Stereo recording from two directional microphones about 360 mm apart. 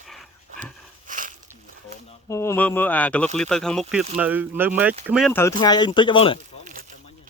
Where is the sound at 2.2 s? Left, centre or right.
Centre.